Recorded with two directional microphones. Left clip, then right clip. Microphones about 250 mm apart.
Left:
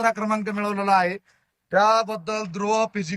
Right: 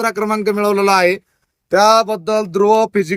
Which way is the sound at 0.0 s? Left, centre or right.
Right.